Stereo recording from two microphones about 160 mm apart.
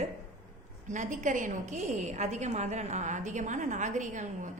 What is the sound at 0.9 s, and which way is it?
A woman's voice, 50° right (ahead or behind).